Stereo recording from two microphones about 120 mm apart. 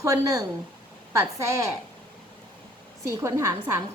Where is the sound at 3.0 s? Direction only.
25° right (ahead or behind).